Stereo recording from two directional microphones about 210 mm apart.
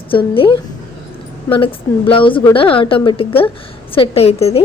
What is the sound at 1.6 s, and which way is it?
A woman's voice, 25° left (ahead or behind).